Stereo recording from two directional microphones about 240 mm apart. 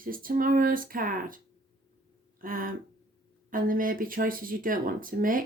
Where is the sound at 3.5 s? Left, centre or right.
Right.